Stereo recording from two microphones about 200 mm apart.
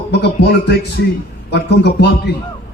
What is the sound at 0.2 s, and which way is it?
A man's voice, 55° left (ahead or behind).